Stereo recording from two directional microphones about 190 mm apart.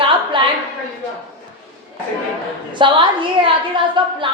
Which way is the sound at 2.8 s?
25° right (ahead or behind).